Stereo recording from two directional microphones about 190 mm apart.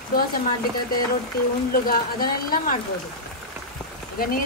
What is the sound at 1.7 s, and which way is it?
Speech, 50° left (ahead or behind).